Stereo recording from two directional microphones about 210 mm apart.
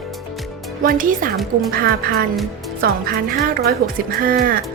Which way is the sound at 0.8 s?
40° right (ahead or behind).